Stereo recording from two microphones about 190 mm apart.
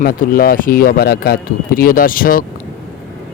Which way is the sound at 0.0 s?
50° left (ahead or behind).